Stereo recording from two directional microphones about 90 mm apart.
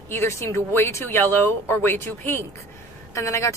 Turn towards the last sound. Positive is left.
turn(degrees=35)  # may be behind; listen again after turning